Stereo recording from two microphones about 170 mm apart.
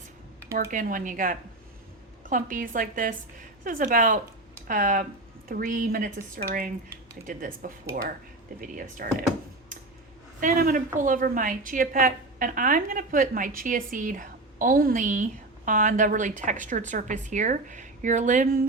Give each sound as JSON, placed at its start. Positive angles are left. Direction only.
{"t": 0.5, "sound": "a woman's voice", "side_deg": -50}
{"t": 10.4, "sound": "a woman's voice", "side_deg": -55}